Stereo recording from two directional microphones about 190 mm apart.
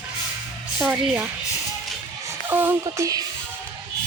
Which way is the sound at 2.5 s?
10° right (ahead or behind).